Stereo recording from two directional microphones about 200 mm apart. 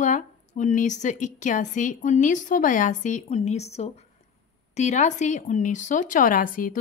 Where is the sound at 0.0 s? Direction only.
40° left (ahead or behind).